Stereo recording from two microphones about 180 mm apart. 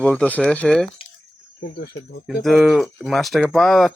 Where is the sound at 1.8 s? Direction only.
70° left (ahead or behind).